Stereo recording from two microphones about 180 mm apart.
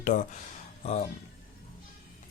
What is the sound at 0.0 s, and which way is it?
Speech, 45° left (ahead or behind).